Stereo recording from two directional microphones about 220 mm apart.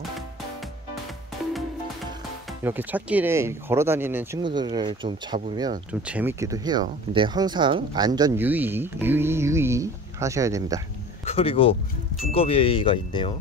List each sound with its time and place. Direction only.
2.6 s speech: 10° right (ahead or behind)
4.4 s speech: 20° right (ahead or behind)
5.9 s speech: 5° right (ahead or behind)
11.2 s speech: 25° left (ahead or behind)